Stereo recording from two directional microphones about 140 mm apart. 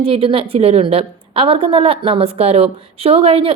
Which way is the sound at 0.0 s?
40° right (ahead or behind).